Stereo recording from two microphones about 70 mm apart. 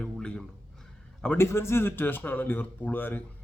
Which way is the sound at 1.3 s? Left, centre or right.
Left.